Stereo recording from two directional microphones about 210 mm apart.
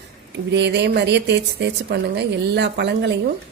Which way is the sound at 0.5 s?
55° right (ahead or behind).